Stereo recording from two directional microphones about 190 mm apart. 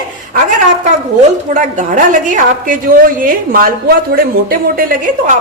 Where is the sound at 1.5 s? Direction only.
45° right (ahead or behind).